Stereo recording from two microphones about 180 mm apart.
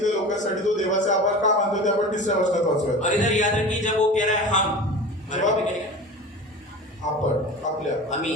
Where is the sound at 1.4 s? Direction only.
45° left (ahead or behind).